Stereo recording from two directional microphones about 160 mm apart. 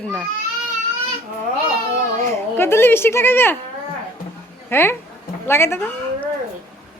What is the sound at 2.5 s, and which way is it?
Speech, 15° left (ahead or behind).